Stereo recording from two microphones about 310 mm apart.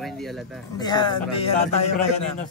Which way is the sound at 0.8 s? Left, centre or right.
Centre.